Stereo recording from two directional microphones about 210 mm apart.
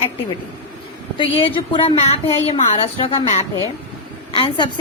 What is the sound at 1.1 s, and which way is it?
A woman's voice, 25° left (ahead or behind).